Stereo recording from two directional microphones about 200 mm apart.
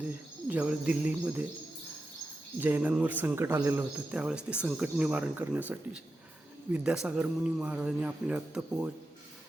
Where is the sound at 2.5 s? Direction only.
10° right (ahead or behind).